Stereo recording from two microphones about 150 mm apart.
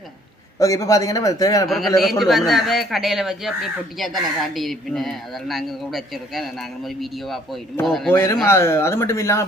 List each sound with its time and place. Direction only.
0.6 s a man's voice: 20° left (ahead or behind)
1.6 s speech: centre (ahead or behind)
8.1 s speech: 15° left (ahead or behind)